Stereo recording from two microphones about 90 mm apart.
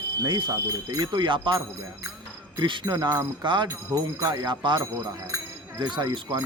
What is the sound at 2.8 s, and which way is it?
Speech, 55° right (ahead or behind).